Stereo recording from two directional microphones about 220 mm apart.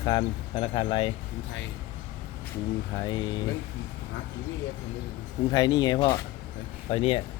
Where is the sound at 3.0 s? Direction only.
20° left (ahead or behind).